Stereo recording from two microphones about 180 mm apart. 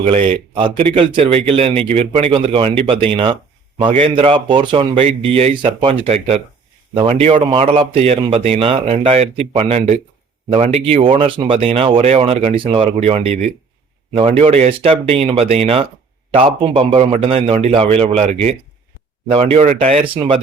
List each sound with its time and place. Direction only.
0.0 s a man's voice: 35° right (ahead or behind)